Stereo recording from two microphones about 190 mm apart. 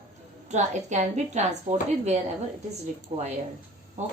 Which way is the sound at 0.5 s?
40° right (ahead or behind).